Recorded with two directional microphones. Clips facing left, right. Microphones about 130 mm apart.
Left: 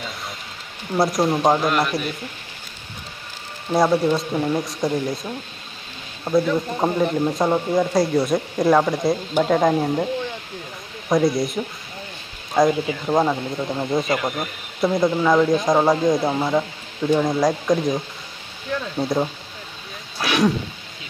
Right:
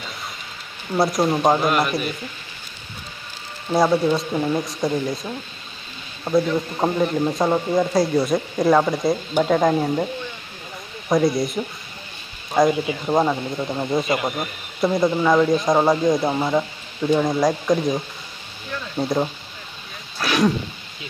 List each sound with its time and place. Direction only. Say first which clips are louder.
0.9 s speech: even; centre (ahead or behind)
3.7 s speech: even; centre (ahead or behind)
11.1 s speech: even; centre (ahead or behind)
12.7 s speech: even; 15° right (ahead or behind)
13.1 s speech: even; centre (ahead or behind)